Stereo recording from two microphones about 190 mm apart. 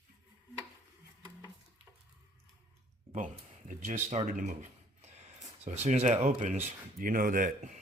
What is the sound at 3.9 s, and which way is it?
Speech, 40° right (ahead or behind).